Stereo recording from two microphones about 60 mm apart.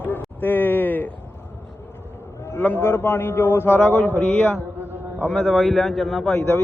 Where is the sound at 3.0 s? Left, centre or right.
Left.